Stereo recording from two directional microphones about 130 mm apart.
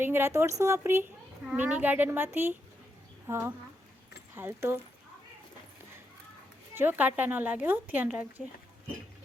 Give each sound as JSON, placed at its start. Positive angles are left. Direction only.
{"t": 0.0, "sound": "speech", "side_deg": -15}
{"t": 6.7, "sound": "speech", "side_deg": -15}